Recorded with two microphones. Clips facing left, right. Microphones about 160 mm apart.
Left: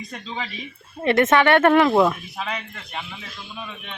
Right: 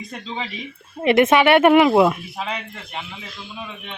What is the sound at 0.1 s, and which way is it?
Speech, 20° right (ahead or behind).